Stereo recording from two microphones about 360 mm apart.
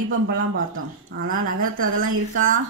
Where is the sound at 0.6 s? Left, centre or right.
Right.